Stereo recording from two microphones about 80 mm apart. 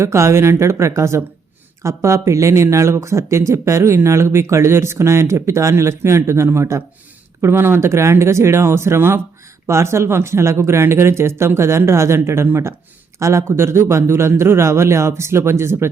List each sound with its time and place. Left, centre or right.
0.0 s speech: right